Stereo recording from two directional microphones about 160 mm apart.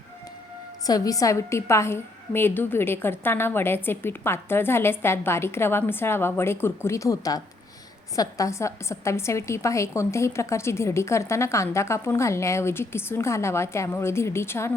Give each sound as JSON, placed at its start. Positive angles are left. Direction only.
{"t": 0.9, "sound": "a woman's voice", "side_deg": 20}